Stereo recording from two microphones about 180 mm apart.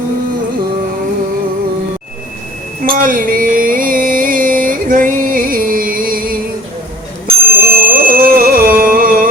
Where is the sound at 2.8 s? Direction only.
50° right (ahead or behind).